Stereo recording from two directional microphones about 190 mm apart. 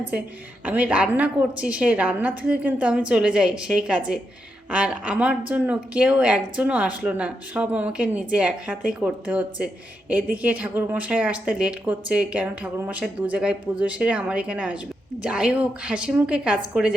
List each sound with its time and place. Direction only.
0.6 s a woman's voice: 10° right (ahead or behind)